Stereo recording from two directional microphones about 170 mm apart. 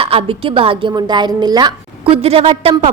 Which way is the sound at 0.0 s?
35° right (ahead or behind).